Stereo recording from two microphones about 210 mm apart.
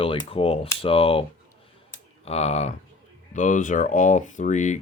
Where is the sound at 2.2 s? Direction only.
30° left (ahead or behind).